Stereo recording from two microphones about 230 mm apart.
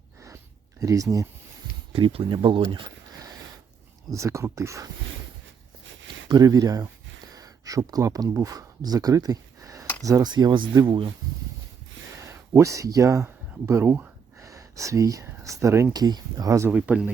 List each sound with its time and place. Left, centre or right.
0.8 s speech: centre
5.8 s a sound: right
6.2 s speech: centre
12.2 s speech: centre